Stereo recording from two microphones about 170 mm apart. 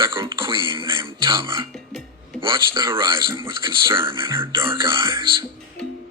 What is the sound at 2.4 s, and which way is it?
Speech, 30° right (ahead or behind).